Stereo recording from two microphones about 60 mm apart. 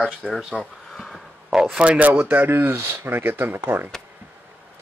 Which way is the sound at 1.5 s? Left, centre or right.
Centre.